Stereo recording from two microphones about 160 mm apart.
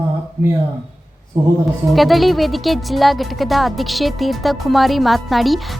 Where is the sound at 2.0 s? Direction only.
Centre (ahead or behind).